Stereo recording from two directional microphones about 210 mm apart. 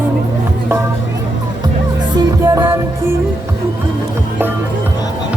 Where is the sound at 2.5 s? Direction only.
15° right (ahead or behind).